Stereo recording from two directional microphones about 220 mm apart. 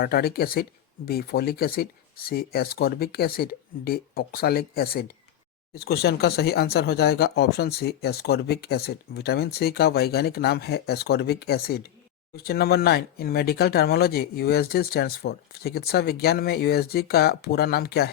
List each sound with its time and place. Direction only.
0.0 s speech: 45° left (ahead or behind)